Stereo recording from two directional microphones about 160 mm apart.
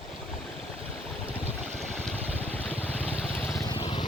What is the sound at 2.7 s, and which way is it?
Boat, 40° right (ahead or behind).